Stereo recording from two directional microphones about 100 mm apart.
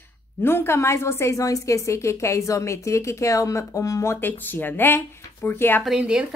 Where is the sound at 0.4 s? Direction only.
25° left (ahead or behind).